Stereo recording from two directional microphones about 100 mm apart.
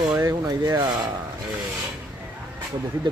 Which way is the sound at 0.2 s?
35° right (ahead or behind).